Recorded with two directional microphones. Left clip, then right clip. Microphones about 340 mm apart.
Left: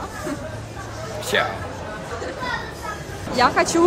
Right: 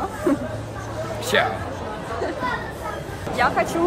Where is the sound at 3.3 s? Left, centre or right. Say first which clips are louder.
Left 3 dB; left.